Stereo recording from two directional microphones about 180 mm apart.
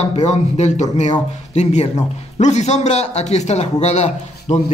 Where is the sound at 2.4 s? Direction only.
40° left (ahead or behind).